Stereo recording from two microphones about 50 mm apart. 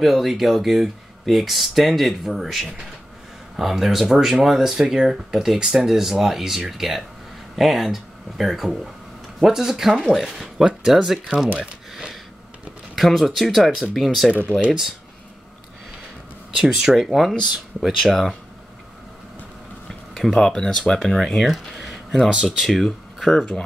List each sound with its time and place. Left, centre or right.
0.0 s speech: centre
11.3 s speech: right
11.6 s a sound: centre
12.9 s speech: centre
16.5 s speech: centre
19.9 s speech: centre
21.5 s speech: centre
22.7 s speech: centre
23.3 s speech: centre